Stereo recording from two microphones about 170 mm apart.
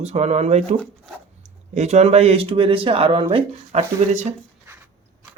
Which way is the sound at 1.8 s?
40° right (ahead or behind).